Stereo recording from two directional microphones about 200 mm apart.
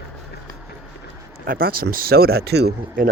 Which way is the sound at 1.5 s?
45° right (ahead or behind).